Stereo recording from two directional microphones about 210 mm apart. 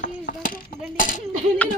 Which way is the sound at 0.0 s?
40° left (ahead or behind).